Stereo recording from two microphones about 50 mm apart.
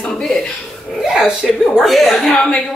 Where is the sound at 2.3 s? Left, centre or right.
Centre.